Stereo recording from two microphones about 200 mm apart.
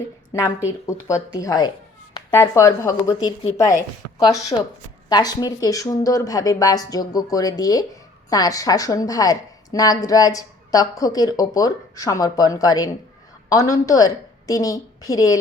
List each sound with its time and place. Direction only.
0.3 s a woman's voice: 15° left (ahead or behind)